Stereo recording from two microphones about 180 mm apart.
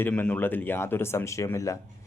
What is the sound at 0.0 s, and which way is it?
A man's voice, 10° left (ahead or behind).